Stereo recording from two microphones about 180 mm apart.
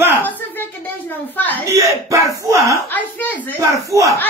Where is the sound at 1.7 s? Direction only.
20° right (ahead or behind).